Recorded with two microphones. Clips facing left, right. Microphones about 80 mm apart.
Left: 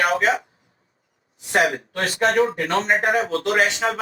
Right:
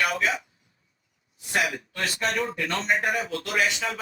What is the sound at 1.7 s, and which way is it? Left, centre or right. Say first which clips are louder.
Speech: left 5 dB; left.